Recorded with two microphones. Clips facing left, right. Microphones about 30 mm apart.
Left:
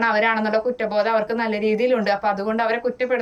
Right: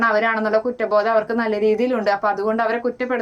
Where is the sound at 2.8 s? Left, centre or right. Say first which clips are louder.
Even; centre.